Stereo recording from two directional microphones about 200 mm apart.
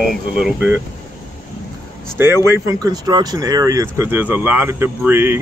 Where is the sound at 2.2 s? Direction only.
15° right (ahead or behind).